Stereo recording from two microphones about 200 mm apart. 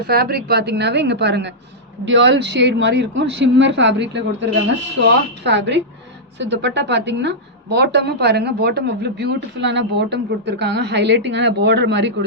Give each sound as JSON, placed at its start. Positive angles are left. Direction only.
{"t": 0.1, "sound": "a woman's voice", "side_deg": -50}